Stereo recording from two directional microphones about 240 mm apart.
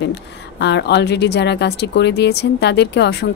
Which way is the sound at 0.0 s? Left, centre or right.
Left.